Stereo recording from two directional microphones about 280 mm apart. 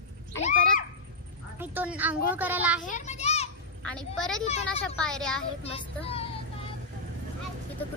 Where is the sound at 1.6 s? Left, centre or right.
Centre.